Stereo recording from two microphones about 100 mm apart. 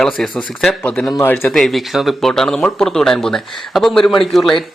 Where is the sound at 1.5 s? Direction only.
5° left (ahead or behind).